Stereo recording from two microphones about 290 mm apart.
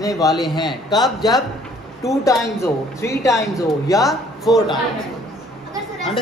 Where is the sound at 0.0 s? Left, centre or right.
Centre.